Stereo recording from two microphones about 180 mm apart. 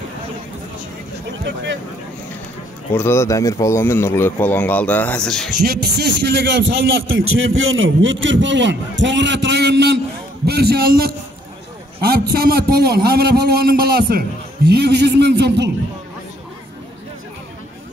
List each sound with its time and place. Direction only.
1.4 s speech: 75° right (ahead or behind)
3.0 s speech: 15° left (ahead or behind)
5.6 s a man's voice: 65° right (ahead or behind)